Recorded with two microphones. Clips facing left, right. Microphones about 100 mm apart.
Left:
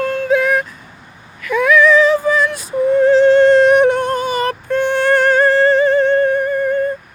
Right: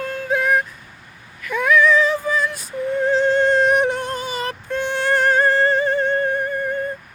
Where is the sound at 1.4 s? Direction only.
90° left.